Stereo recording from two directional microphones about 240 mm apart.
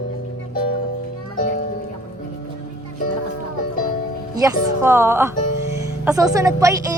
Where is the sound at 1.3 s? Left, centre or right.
Left.